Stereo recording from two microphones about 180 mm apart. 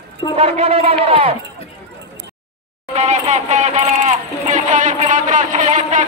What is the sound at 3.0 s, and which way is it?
Speech, 40° right (ahead or behind).